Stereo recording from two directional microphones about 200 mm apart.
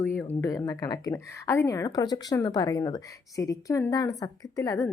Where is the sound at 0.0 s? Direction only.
10° left (ahead or behind).